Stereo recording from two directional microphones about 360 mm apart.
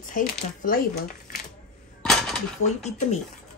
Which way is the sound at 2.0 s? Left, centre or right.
Centre.